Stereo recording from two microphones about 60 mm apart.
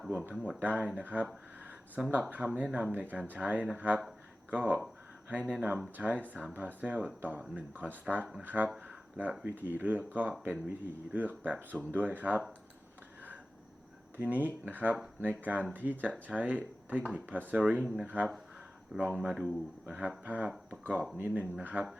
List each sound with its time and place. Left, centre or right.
0.6 s speech: right
2.0 s speech: centre
14.2 s speech: right
17.6 s speech: centre